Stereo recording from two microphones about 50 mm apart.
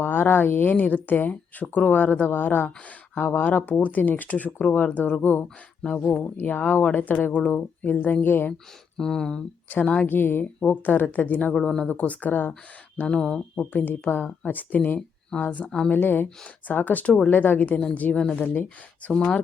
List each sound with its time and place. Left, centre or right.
0.0 s speech: left
7.2 s speech: left
9.0 s speech: centre
9.6 s speech: left
10.1 s speech: left
10.6 s speech: left
11.5 s speech: centre
11.9 s speech: left
13.1 s speech: centre
13.6 s speech: left
15.9 s speech: left
19.1 s speech: centre